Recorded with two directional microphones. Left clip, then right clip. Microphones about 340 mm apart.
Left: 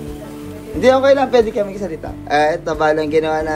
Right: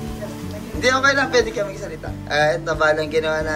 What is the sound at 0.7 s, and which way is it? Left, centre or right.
A woman's voice, centre.